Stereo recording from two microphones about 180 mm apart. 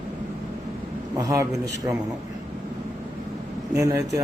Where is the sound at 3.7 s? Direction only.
15° right (ahead or behind).